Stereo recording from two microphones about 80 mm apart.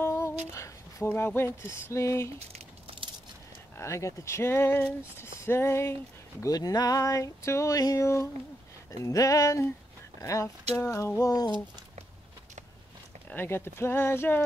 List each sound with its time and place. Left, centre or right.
0.0 s a sound: left
1.0 s speech: left
3.7 s speech: left
6.4 s a sound: left
10.1 s speech: left
13.3 s speech: left